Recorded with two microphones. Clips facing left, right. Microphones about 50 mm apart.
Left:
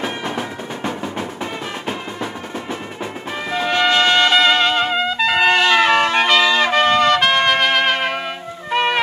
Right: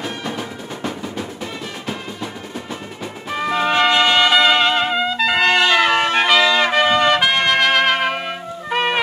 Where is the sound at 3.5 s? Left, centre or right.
Centre.